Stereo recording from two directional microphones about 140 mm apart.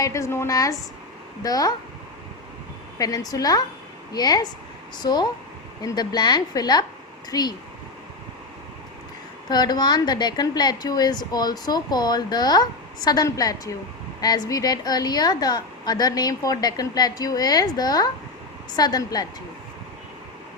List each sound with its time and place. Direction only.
0.0 s a woman's voice: 20° left (ahead or behind)
3.0 s a woman's voice: 25° left (ahead or behind)
5.8 s a woman's voice: 25° left (ahead or behind)
9.5 s a woman's voice: 30° left (ahead or behind)